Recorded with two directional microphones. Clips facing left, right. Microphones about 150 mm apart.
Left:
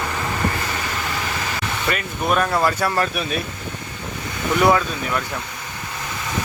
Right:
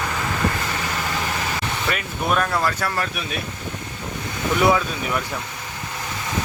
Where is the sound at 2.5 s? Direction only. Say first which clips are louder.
Left 3 dB; 15° left (ahead or behind).